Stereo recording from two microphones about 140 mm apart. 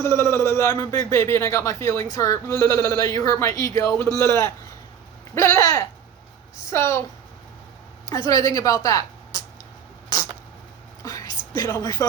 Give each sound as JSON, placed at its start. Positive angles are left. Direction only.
{"t": 0.0, "sound": "a man's voice", "side_deg": 20}
{"t": 8.3, "sound": "a man's voice", "side_deg": 25}
{"t": 11.0, "sound": "a sound", "side_deg": 25}